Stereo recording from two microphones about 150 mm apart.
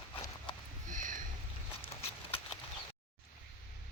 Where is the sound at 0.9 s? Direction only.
60° right (ahead or behind).